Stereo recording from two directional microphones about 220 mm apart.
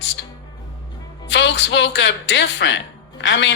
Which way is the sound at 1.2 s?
55° left (ahead or behind).